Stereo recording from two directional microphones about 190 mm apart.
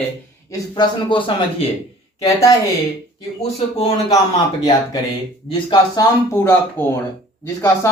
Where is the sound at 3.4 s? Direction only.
30° left (ahead or behind).